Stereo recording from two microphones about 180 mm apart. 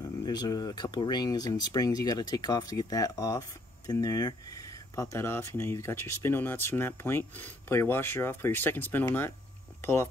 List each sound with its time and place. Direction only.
0.0 s speech: 20° left (ahead or behind)